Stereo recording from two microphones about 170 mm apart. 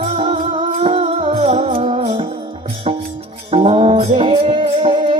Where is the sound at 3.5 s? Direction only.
35° right (ahead or behind).